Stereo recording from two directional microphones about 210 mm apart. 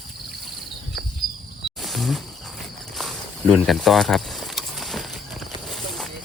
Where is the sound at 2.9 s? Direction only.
Centre (ahead or behind).